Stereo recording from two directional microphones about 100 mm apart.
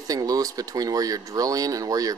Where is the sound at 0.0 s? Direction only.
35° right (ahead or behind).